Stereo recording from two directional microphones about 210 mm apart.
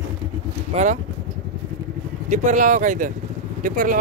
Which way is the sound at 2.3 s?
35° right (ahead or behind).